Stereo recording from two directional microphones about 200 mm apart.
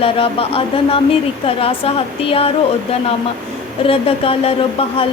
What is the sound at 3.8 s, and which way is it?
Speech, 30° left (ahead or behind).